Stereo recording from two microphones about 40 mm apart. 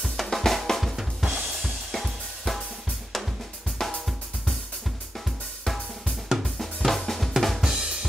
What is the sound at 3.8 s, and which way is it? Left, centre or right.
Drum, centre.